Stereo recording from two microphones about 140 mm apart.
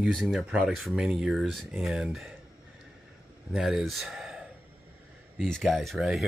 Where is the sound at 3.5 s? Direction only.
5° right (ahead or behind).